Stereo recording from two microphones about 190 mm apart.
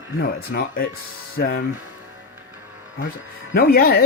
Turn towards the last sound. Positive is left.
turn(degrees=55)  # may be behind; listen again after turning